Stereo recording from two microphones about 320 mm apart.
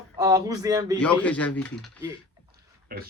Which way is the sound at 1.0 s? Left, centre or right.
Centre.